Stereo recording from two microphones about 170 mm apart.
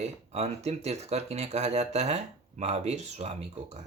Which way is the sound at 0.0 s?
40° right (ahead or behind).